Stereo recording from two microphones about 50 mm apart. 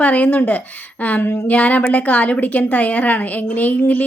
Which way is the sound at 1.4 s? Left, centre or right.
Left.